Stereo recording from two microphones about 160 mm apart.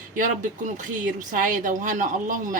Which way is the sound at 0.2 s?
50° right (ahead or behind).